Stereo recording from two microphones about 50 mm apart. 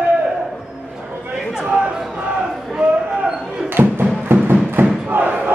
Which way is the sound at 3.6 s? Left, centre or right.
Right.